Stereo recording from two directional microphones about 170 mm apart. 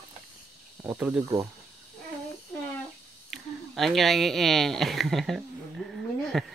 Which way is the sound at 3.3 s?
Centre (ahead or behind).